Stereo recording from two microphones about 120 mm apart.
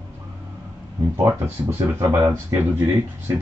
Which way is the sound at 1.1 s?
20° right (ahead or behind).